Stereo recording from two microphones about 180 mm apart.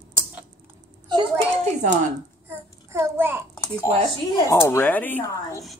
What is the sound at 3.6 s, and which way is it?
Speech, 15° left (ahead or behind).